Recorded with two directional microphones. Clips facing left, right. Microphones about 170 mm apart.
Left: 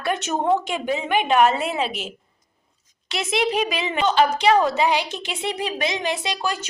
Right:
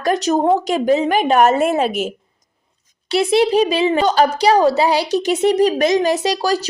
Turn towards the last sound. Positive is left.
turn(degrees=-35)  # may be behind; listen again after turning